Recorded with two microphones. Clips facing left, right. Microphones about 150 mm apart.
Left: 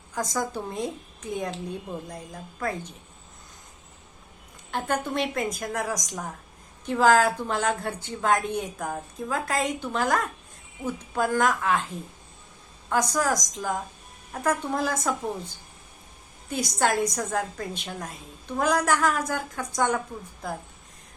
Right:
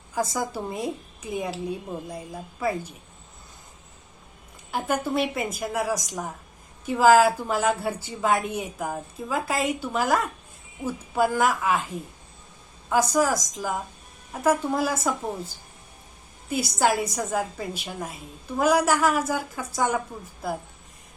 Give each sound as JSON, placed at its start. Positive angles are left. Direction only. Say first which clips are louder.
{"t": 0.1, "sound": "a woman's voice", "louder": "right 2 dB", "side_deg": -10}
{"t": 4.7, "sound": "a woman's voice", "louder": "right 2 dB", "side_deg": -5}
{"t": 12.9, "sound": "a woman's voice", "louder": "right 3 dB", "side_deg": -5}
{"t": 16.5, "sound": "a woman's voice", "louder": "right 2 dB", "side_deg": -5}